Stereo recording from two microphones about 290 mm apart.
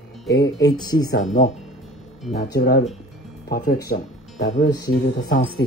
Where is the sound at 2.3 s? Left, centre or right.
Left.